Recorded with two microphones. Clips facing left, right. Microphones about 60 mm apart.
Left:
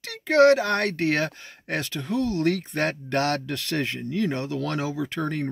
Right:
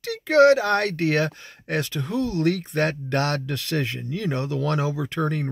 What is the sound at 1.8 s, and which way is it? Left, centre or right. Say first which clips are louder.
Speech: even; right.